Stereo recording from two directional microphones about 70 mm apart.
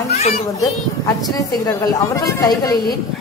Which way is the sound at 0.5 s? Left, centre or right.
Left.